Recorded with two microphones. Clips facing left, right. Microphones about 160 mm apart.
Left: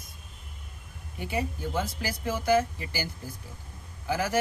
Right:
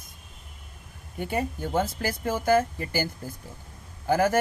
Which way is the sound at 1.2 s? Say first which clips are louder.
Right 3 dB; 50° right (ahead or behind).